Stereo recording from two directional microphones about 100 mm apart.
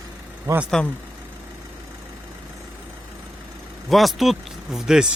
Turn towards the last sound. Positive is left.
turn(degrees=-5)  # may be behind; listen again after turning